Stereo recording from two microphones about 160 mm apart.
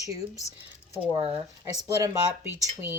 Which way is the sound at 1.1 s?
40° right (ahead or behind).